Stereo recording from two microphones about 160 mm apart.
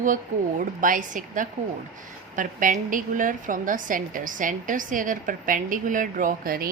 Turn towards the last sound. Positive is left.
turn(degrees=-65)  # may be behind; listen again after turning